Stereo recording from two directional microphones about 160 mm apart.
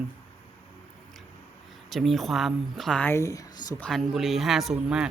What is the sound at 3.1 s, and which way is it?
Speech, 20° left (ahead or behind).